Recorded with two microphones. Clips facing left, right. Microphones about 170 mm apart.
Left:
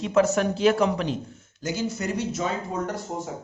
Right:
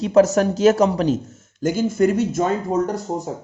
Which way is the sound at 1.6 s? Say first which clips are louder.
Right 10 dB; 50° right (ahead or behind).